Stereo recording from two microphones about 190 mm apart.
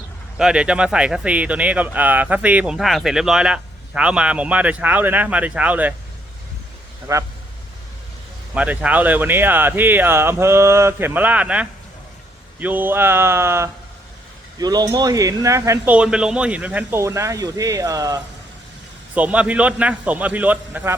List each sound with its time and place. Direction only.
0.3 s speech: 5° right (ahead or behind)
7.1 s speech: 15° right (ahead or behind)
8.5 s speech: 5° right (ahead or behind)
19.1 s speech: 5° right (ahead or behind)